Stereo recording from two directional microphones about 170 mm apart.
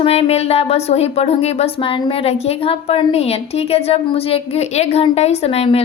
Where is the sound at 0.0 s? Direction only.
35° left (ahead or behind).